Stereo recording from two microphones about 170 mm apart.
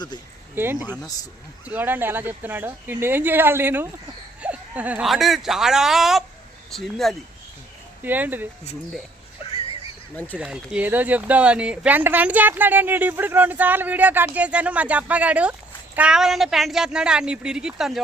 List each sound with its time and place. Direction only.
0.5 s speech: 10° right (ahead or behind)
0.9 s speech: 20° left (ahead or behind)
1.6 s speech: 10° right (ahead or behind)
8.0 s speech: 10° right (ahead or behind)
10.3 s speech: 5° right (ahead or behind)